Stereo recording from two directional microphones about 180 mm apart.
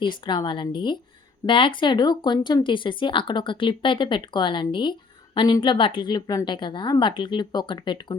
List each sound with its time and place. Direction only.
0.0 s speech: 25° left (ahead or behind)